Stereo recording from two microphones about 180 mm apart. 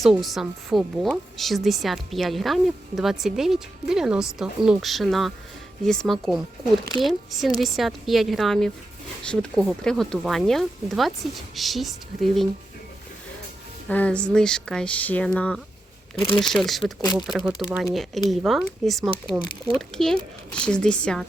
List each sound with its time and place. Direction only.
0.0 s speech: centre (ahead or behind)
13.8 s speech: 5° left (ahead or behind)
16.8 s speech: 20° left (ahead or behind)
17.2 s speech: centre (ahead or behind)